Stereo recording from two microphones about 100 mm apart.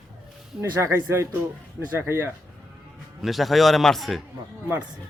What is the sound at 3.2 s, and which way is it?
Speech, centre (ahead or behind).